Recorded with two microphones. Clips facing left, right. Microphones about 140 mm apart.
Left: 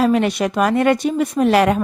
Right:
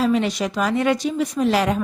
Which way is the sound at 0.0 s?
60° left (ahead or behind).